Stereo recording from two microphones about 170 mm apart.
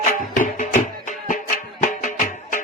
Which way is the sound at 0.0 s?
45° left (ahead or behind).